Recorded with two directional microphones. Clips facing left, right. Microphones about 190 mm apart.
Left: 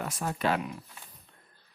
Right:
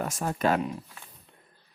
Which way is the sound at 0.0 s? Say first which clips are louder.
Right 3 dB; 40° right (ahead or behind).